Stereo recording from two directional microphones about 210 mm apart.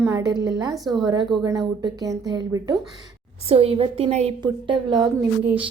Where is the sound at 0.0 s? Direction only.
15° right (ahead or behind).